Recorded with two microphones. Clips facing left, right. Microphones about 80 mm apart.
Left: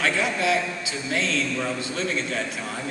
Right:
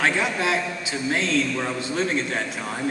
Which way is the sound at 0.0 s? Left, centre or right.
Right.